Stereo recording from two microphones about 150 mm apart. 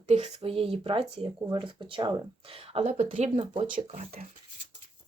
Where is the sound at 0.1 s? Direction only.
45° right (ahead or behind).